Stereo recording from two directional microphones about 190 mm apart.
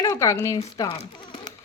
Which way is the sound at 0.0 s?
20° left (ahead or behind).